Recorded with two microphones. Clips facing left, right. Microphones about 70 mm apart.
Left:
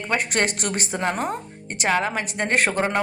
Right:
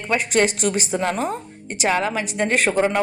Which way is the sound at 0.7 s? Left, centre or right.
Left.